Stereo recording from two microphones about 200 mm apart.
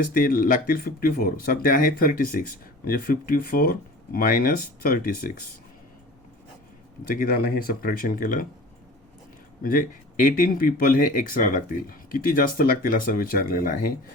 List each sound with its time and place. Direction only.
0.1 s speech: 45° left (ahead or behind)
7.1 s speech: 45° left (ahead or behind)
9.6 s speech: 45° left (ahead or behind)